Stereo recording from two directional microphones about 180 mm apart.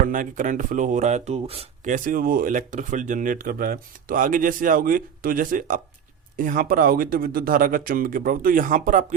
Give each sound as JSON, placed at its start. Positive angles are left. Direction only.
{"t": 0.0, "sound": "speech", "side_deg": -50}